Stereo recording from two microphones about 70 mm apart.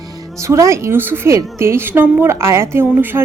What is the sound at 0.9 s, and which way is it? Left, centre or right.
A woman's voice, right.